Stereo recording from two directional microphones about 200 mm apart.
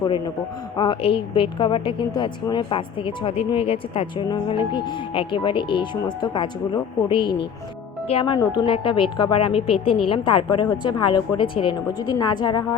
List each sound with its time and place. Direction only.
0.8 s a woman's voice: 25° left (ahead or behind)